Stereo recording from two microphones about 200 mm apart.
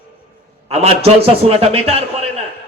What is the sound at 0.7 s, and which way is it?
A man's voice, 30° right (ahead or behind).